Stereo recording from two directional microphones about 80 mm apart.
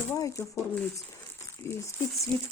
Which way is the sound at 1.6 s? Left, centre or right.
Left.